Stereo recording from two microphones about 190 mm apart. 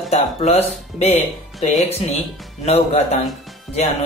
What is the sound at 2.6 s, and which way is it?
Speech, 35° left (ahead or behind).